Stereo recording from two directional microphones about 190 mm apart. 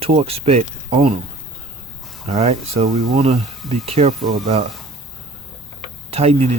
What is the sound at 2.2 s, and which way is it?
Speech, 35° right (ahead or behind).